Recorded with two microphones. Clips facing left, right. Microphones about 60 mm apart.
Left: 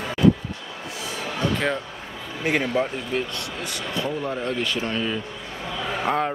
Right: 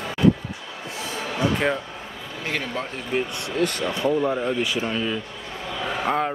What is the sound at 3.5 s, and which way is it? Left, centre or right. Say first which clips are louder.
Speech: right 13 dB; right.